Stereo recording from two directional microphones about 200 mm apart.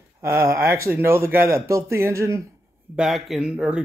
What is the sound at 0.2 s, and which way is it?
Speech, 15° right (ahead or behind).